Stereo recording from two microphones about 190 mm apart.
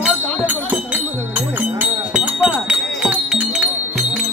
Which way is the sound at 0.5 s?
10° right (ahead or behind).